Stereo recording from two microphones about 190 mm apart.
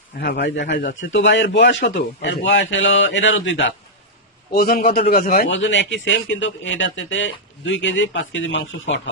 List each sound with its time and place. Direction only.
0.2 s a man's voice: 60° left (ahead or behind); by 3.8 s 75° left (ahead or behind)
4.5 s a man's voice: 50° left (ahead or behind)
5.5 s a man's voice: 75° left (ahead or behind)